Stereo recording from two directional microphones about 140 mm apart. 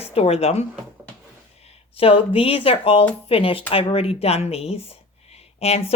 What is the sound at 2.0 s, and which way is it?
Speech, 45° left (ahead or behind).